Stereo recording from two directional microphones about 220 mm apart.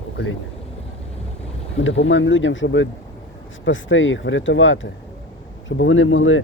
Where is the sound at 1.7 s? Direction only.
60° left (ahead or behind).